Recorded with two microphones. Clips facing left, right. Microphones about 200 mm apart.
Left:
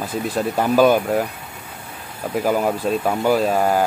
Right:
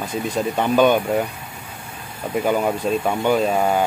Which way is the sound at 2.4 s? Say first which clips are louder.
Even; 5° left (ahead or behind).